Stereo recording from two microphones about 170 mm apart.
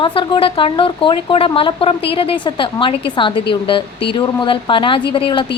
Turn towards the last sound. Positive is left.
turn(degrees=30)  # may be behind; listen again after turning